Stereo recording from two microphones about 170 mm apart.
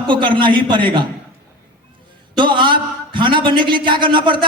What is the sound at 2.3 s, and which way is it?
A man's voice, 30° right (ahead or behind).